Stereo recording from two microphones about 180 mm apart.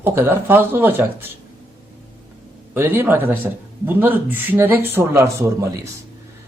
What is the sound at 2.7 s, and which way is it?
Speech, 10° right (ahead or behind).